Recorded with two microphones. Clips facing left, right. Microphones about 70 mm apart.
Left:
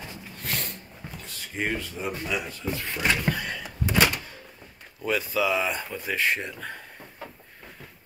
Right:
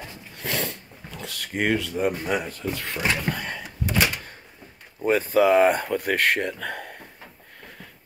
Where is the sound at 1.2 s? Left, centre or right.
Right.